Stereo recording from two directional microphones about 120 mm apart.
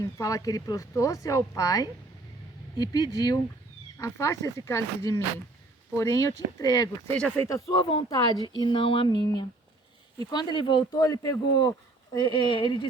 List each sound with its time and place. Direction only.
0.0 s speech: 25° left (ahead or behind)
7.7 s speech: 40° left (ahead or behind)
9.0 s speech: 35° left (ahead or behind)
12.1 s speech: 40° left (ahead or behind)